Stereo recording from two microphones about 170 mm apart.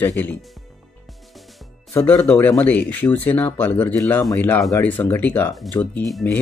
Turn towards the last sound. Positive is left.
turn(degrees=5)  # may be behind; listen again after turning